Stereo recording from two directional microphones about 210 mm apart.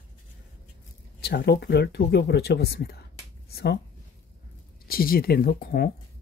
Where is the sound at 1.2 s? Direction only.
50° left (ahead or behind).